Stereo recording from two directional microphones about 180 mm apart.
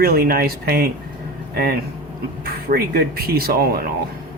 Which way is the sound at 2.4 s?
55° right (ahead or behind).